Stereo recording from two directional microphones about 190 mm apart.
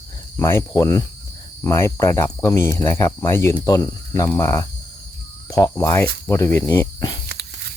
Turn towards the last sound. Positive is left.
turn(degrees=-60)  # may be behind; listen again after turning